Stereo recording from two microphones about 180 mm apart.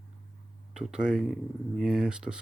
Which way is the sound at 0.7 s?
5° right (ahead or behind).